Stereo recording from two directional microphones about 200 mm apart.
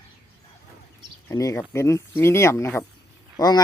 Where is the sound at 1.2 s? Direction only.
15° left (ahead or behind).